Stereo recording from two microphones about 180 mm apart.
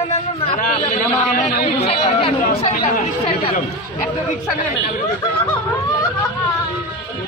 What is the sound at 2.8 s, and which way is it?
Speech, 45° left (ahead or behind).